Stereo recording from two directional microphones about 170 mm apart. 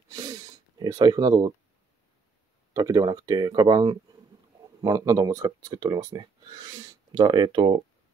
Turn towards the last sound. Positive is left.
turn(degrees=-25)  # may be behind; listen again after turning